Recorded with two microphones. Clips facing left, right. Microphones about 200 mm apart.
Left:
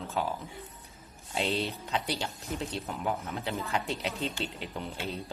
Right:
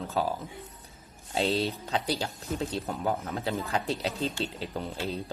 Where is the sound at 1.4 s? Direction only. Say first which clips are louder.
Right 4 dB; 35° right (ahead or behind).